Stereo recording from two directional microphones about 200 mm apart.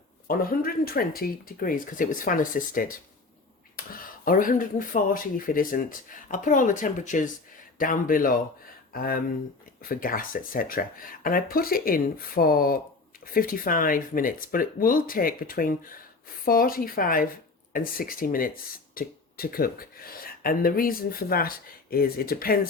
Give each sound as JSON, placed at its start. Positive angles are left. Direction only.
{"t": 0.3, "sound": "speech", "side_deg": 45}
{"t": 4.3, "sound": "speech", "side_deg": 45}